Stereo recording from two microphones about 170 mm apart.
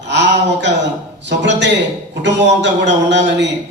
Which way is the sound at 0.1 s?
90° right.